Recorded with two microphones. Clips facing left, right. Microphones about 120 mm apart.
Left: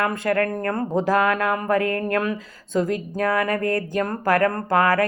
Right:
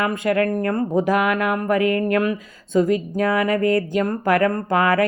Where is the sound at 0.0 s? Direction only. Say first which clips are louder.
Right 2 dB; 15° right (ahead or behind).